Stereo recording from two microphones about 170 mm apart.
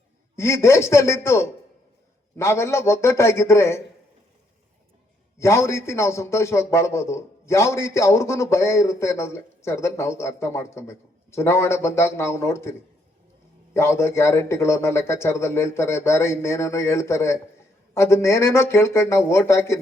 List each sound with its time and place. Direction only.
0.3 s a man's voice: 15° left (ahead or behind)
5.4 s a man's voice: 15° left (ahead or behind)
13.7 s a man's voice: 15° left (ahead or behind)